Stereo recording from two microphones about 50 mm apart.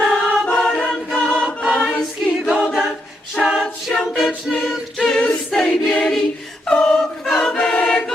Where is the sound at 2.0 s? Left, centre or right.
Centre.